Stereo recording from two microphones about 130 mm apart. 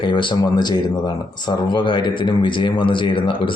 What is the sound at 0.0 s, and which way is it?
Speech, 40° left (ahead or behind).